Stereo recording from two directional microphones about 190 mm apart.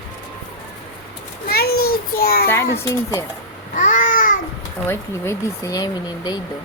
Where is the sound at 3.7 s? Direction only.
45° left (ahead or behind).